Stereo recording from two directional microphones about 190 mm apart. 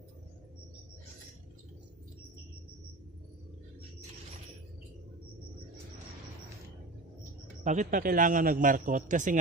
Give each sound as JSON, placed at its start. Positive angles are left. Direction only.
{"t": 7.6, "sound": "a man's voice", "side_deg": -40}